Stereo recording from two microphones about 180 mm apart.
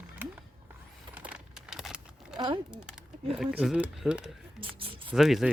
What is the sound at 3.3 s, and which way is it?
Speech, 5° right (ahead or behind).